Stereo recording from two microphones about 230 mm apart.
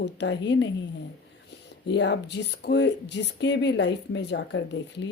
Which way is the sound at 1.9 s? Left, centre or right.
Left.